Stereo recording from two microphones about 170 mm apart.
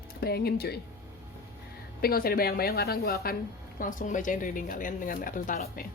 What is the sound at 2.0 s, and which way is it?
A woman's voice, 65° left (ahead or behind).